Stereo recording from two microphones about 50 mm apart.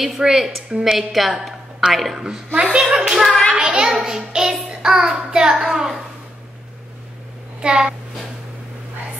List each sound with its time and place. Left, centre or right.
0.0 s a woman's voice: centre
0.9 s a woman's voice: centre
2.1 s a woman's voice: centre
3.5 s a sound: right
3.8 s child singing: centre
7.6 s a woman's voice: centre